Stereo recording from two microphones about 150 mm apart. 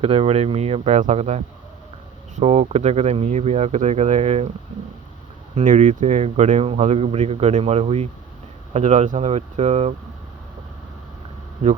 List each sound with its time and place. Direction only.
0.0 s speech: 40° right (ahead or behind)
5.5 s speech: 50° right (ahead or behind)